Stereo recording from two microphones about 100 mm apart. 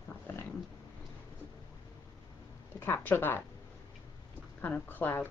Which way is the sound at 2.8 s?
20° left (ahead or behind).